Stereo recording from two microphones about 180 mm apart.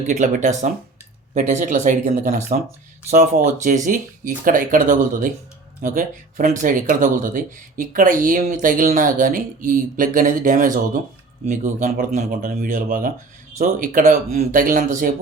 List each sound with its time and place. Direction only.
0.1 s speech: 45° right (ahead or behind)